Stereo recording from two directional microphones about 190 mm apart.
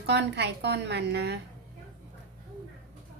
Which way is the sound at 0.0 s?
65° right (ahead or behind).